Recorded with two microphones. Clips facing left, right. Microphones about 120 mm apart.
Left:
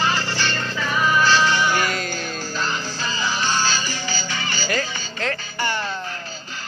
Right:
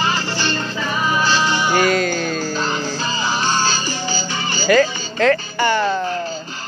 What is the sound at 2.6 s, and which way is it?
Music, 25° right (ahead or behind).